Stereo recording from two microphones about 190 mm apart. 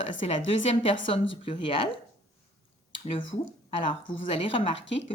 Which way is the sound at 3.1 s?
30° left (ahead or behind).